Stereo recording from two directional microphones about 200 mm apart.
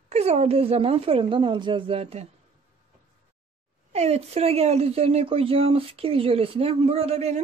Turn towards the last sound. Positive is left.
turn(degrees=-30)  # may be behind; listen again after turning